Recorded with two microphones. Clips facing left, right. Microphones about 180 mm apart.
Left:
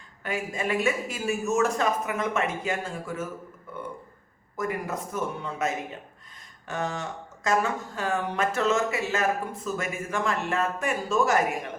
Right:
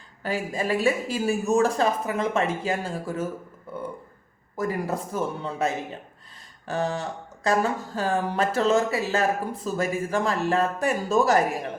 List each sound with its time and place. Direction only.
0.2 s speech: 35° right (ahead or behind)
3.7 s burping: 35° right (ahead or behind)
4.5 s speech: 30° right (ahead or behind)